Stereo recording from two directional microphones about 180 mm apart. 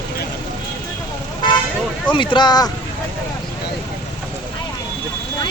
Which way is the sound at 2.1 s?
25° left (ahead or behind).